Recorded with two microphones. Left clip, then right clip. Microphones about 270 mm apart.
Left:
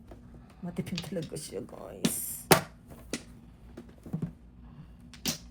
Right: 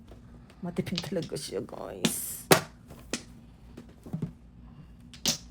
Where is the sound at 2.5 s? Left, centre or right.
Centre.